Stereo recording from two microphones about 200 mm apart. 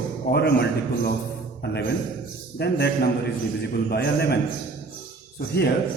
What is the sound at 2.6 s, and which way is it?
A man's voice, 55° left (ahead or behind).